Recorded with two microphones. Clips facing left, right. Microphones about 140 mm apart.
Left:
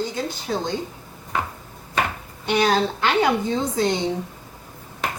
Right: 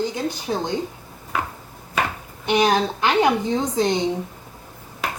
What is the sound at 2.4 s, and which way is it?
A woman's voice, 15° right (ahead or behind).